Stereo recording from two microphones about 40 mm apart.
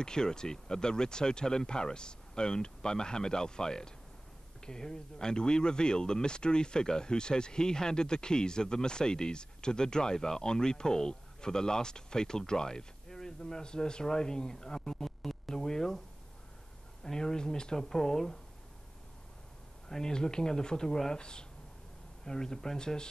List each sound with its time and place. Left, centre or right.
0.0 s speech: centre
17.0 s speech: centre
19.9 s speech: centre